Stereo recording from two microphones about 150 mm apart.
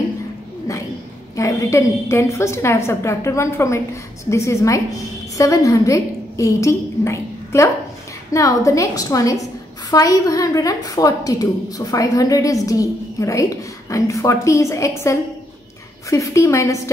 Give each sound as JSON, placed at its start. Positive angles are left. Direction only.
{"t": 0.7, "sound": "a woman's voice", "side_deg": 20}